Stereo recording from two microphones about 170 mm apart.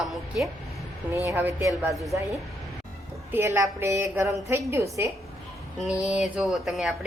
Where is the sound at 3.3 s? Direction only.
15° right (ahead or behind).